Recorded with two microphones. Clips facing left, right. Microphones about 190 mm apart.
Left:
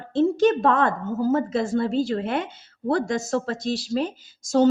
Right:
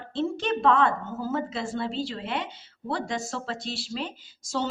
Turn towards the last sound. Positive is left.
turn(degrees=45)  # may be behind; listen again after turning